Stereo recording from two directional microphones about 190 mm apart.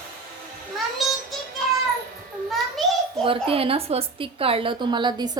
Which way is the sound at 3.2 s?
30° right (ahead or behind).